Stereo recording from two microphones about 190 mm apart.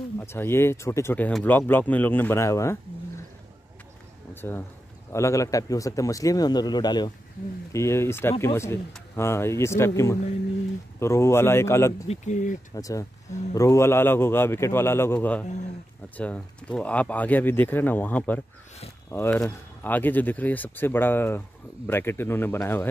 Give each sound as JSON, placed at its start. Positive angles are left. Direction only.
{"t": 0.2, "sound": "speech", "side_deg": 10}
{"t": 4.4, "sound": "speech", "side_deg": 10}
{"t": 12.1, "sound": "speech", "side_deg": 40}
{"t": 12.7, "sound": "speech", "side_deg": 20}
{"t": 15.4, "sound": "speech", "side_deg": 40}
{"t": 16.2, "sound": "speech", "side_deg": 5}